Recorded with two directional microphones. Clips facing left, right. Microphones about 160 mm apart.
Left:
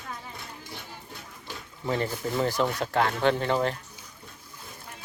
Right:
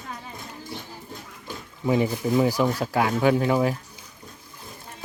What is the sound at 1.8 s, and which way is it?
Speech, 15° right (ahead or behind).